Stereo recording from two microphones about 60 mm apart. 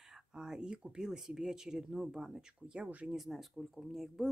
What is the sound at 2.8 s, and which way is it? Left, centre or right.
Speech, right.